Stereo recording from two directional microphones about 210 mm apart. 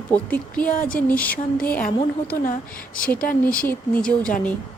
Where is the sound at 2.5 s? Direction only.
40° left (ahead or behind).